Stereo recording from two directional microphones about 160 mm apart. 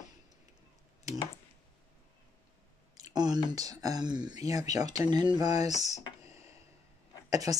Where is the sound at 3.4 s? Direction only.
25° right (ahead or behind).